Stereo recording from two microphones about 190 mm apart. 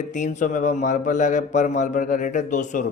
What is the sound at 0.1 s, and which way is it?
A man's voice, 40° left (ahead or behind).